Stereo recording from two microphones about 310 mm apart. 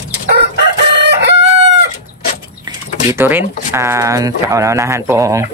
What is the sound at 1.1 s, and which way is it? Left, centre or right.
Crowing, right.